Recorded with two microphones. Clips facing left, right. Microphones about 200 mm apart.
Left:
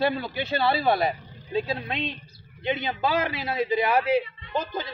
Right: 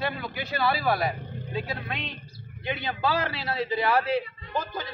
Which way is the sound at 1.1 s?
55° right (ahead or behind).